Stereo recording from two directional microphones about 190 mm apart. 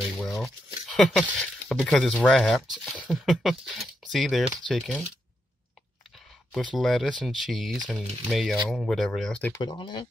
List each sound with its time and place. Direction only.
0.2 s speech: centre (ahead or behind)
6.5 s speech: centre (ahead or behind)
9.5 s speech: 20° left (ahead or behind)